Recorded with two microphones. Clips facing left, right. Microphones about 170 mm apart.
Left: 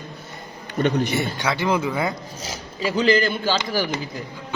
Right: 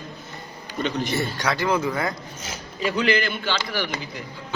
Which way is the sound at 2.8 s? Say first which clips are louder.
Left 3 dB; 35° left (ahead or behind).